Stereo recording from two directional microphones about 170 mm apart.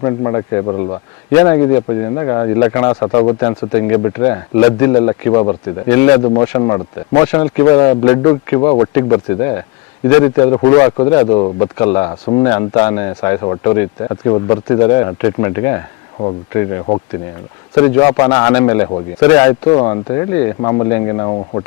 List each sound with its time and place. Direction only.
0.0 s speech: 20° left (ahead or behind)
5.3 s speech: 25° left (ahead or behind)
5.9 s speech: 15° left (ahead or behind)
17.7 s speech: 20° left (ahead or behind)